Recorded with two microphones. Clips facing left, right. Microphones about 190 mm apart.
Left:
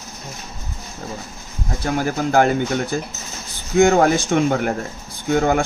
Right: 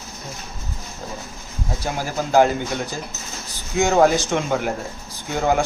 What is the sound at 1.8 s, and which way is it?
Speech, 55° left (ahead or behind).